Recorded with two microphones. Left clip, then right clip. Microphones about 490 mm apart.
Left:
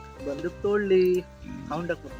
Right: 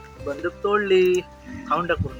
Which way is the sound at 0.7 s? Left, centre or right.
Left.